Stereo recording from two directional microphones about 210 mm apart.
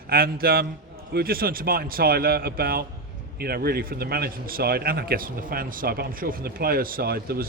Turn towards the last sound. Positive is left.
turn(degrees=-50)  # may be behind; listen again after turning